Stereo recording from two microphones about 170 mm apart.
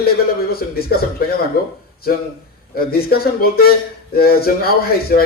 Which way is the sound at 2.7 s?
65° left (ahead or behind).